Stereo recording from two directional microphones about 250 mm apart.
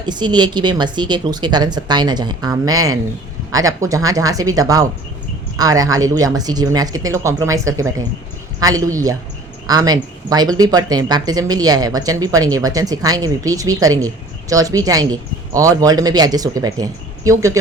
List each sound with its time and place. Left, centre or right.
0.0 s speech: centre